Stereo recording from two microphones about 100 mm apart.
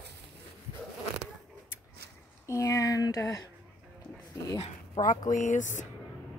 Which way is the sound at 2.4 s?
35° left (ahead or behind).